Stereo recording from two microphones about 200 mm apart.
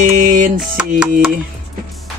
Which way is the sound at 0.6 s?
5° right (ahead or behind).